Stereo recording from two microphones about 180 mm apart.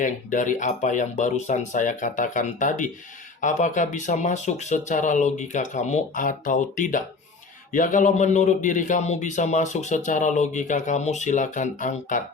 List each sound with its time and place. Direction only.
0.0 s a man's voice: 45° left (ahead or behind)